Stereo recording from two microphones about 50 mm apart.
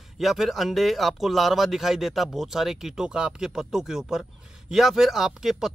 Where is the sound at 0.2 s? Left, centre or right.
Centre.